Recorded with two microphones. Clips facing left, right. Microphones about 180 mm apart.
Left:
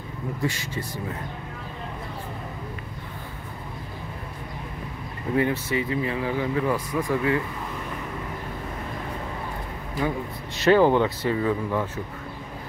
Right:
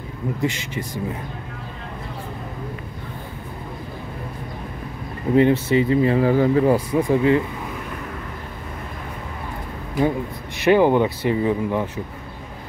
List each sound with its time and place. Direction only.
0.4 s speech: 20° right (ahead or behind)
5.3 s speech: 25° right (ahead or behind)
10.6 s speech: 15° right (ahead or behind)